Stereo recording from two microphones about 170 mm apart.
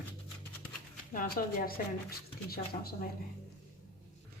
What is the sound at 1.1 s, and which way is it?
A woman's voice, 55° left (ahead or behind).